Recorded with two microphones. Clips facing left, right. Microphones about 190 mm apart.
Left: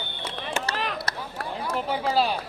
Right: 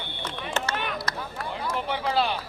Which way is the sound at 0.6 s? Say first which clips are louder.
Left 1 dB; 35° left (ahead or behind).